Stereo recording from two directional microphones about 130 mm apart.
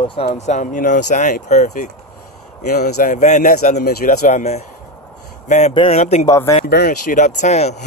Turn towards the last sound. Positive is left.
turn(degrees=60)  # may be behind; listen again after turning